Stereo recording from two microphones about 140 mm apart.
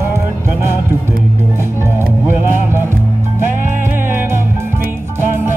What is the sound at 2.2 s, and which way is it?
Music, 15° right (ahead or behind).